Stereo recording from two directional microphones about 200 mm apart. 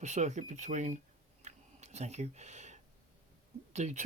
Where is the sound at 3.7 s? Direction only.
35° right (ahead or behind).